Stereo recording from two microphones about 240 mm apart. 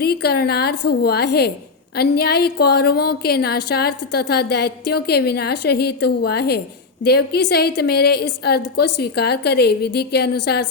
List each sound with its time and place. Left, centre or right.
0.0 s a woman's voice: left